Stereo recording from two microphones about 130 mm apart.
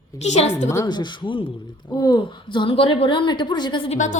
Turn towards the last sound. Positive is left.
turn(degrees=70)  # may be behind; listen again after turning